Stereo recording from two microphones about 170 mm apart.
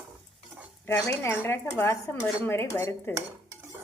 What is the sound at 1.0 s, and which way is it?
A woman's voice, 15° left (ahead or behind).